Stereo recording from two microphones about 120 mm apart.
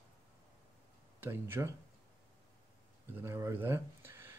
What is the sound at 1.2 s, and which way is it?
Speech, 20° right (ahead or behind).